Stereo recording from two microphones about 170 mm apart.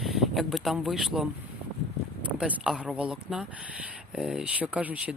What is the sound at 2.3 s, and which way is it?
Speech, 10° right (ahead or behind).